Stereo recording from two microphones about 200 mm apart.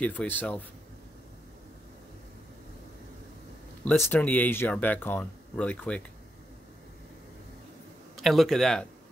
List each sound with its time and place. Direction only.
0.0 s speech: 5° left (ahead or behind)
3.8 s speech: 5° left (ahead or behind)
8.2 s speech: centre (ahead or behind)